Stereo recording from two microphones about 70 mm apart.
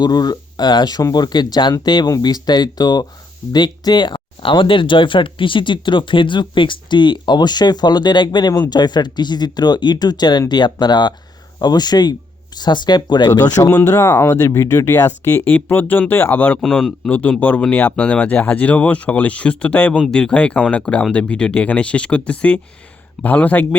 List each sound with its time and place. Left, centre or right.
0.0 s speech: left
3.5 s speech: left
6.4 s speech: left
11.6 s speech: left
13.8 s speech: left
15.5 s speech: left
16.6 s speech: centre
17.1 s speech: left